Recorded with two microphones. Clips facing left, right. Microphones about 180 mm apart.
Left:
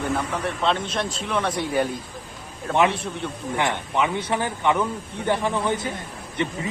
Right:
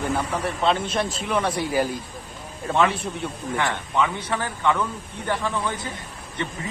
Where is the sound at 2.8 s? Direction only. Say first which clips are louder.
Left 1 dB; 25° left (ahead or behind).